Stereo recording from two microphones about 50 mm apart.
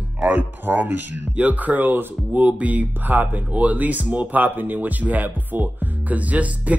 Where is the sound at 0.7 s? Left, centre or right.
Right.